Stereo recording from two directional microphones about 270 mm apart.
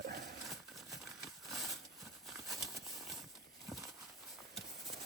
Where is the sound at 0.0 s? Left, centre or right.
Right.